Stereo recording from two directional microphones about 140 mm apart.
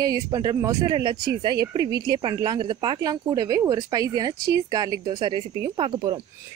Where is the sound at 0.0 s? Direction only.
25° right (ahead or behind).